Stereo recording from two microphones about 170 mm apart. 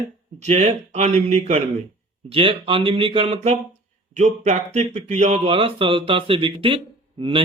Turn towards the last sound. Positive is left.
turn(degrees=-30)  # may be behind; listen again after turning